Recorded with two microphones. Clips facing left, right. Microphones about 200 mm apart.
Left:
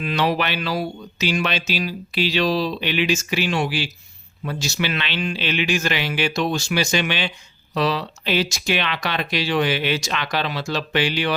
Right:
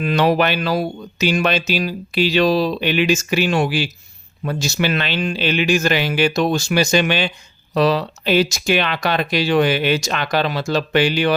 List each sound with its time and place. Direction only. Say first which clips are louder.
0.0 s speech: right 5 dB; 45° right (ahead or behind)